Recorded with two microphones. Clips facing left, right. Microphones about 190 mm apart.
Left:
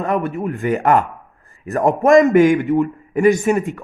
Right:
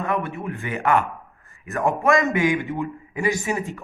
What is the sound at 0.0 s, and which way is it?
A man's voice, 40° left (ahead or behind).